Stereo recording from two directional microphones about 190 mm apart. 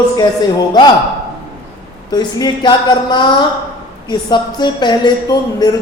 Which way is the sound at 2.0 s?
20° left (ahead or behind).